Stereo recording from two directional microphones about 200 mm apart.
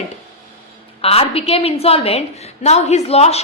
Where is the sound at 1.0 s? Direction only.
30° left (ahead or behind).